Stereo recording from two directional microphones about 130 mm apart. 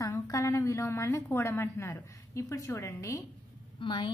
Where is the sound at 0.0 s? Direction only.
25° left (ahead or behind).